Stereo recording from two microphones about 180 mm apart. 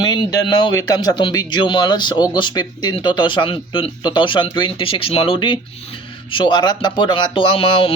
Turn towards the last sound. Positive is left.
turn(degrees=30)  # may be behind; listen again after turning